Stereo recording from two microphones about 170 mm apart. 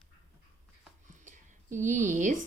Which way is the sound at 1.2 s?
50° right (ahead or behind).